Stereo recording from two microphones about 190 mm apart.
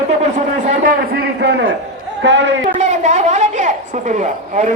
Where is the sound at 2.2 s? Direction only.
70° right (ahead or behind).